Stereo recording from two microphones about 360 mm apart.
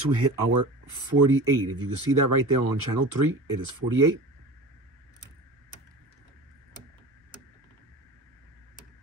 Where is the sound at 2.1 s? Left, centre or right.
Right.